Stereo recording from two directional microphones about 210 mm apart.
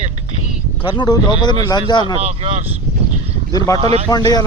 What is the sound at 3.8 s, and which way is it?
Speech, 30° right (ahead or behind).